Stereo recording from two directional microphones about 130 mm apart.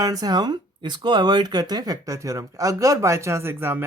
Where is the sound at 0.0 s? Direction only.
30° right (ahead or behind).